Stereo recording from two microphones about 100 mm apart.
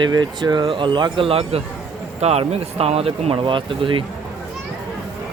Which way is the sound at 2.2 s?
90° right.